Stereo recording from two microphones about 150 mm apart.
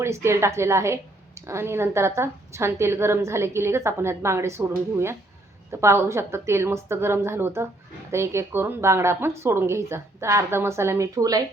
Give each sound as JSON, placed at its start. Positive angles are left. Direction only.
{"t": 0.0, "sound": "a woman's voice", "side_deg": -15}